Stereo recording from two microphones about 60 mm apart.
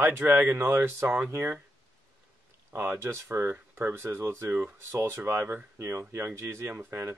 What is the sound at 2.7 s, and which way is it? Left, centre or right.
Speech, right.